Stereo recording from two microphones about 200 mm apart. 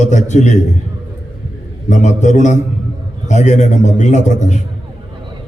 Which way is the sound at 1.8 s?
35° left (ahead or behind).